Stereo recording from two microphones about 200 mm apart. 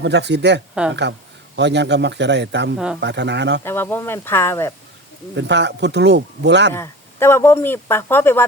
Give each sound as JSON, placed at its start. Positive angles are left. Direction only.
{"t": 0.0, "sound": "speech", "side_deg": -60}
{"t": 2.7, "sound": "speech", "side_deg": -5}
{"t": 3.0, "sound": "speech", "side_deg": -60}
{"t": 3.6, "sound": "speech", "side_deg": 10}
{"t": 5.4, "sound": "speech", "side_deg": -60}
{"t": 6.7, "sound": "speech", "side_deg": 10}